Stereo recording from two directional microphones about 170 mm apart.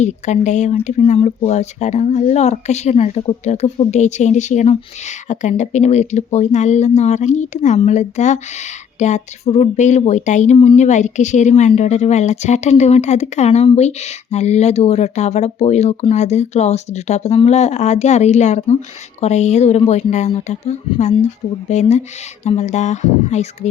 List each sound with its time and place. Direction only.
0.0 s speech: 45° left (ahead or behind)